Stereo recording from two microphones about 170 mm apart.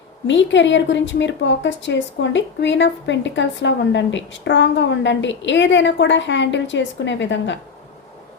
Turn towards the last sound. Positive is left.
turn(degrees=90)